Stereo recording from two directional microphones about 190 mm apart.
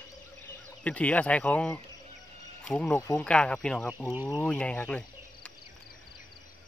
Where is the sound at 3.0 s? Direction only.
15° left (ahead or behind).